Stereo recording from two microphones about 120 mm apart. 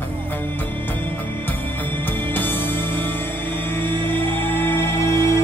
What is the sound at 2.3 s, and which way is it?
Music, 15° left (ahead or behind).